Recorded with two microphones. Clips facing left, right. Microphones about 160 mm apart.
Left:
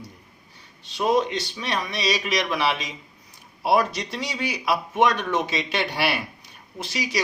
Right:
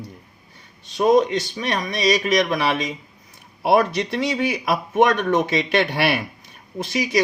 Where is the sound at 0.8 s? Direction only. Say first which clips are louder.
Right 5 dB; 45° right (ahead or behind).